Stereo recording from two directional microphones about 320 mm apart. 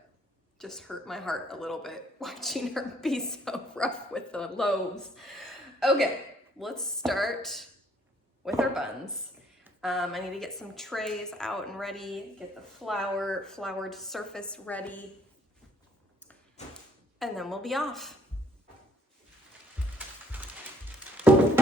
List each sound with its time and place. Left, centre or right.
0.6 s speech: centre
5.1 s a sound: centre
6.6 s speech: centre
16.6 s a sound: left
17.2 s speech: centre
20.0 s music: centre